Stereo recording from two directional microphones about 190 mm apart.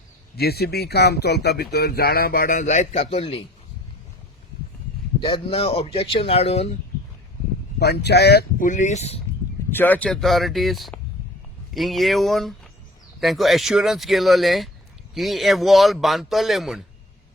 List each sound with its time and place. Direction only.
0.3 s speech: 55° left (ahead or behind); by 3.4 s 35° left (ahead or behind)
5.2 s speech: 30° left (ahead or behind)
7.8 s speech: 60° left (ahead or behind); by 9.2 s 35° left (ahead or behind)
9.7 s speech: 10° left (ahead or behind)